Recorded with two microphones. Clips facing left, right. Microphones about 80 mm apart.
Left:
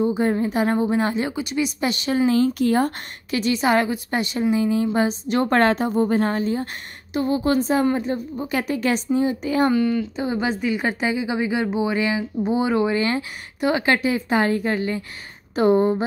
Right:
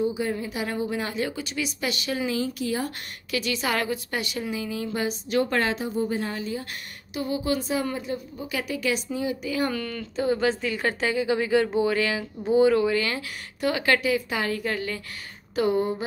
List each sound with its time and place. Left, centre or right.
0.1 s speech: left; by 1.7 s centre
1.8 s speech: left
2.3 s a woman's voice: left
3.3 s speech: left
5.5 s a woman's voice: left
9.7 s speech: centre; by 16.0 s left